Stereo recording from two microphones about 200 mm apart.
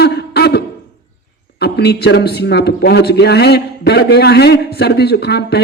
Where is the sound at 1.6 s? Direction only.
55° left (ahead or behind).